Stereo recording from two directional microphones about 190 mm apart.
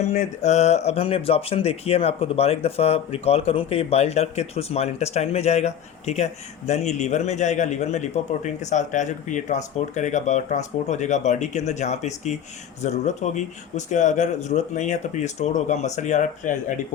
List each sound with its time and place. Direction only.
0.0 s speech: 35° left (ahead or behind)